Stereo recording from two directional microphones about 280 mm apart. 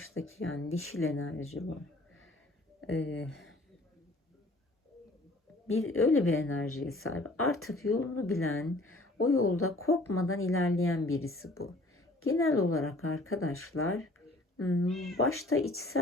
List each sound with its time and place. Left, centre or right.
0.0 s speech: left
2.8 s speech: left
5.6 s speech: left
14.8 s speech: centre
15.1 s speech: left